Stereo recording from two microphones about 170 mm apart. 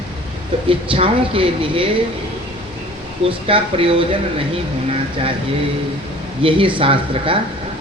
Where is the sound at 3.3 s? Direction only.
30° right (ahead or behind).